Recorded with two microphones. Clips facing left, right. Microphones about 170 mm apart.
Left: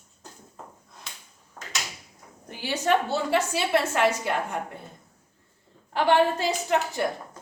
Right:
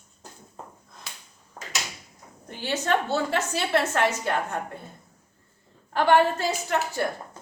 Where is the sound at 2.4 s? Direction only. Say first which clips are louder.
Left 2 dB; 10° left (ahead or behind).